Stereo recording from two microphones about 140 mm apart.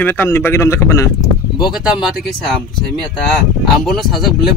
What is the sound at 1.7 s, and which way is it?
Speech, 5° right (ahead or behind).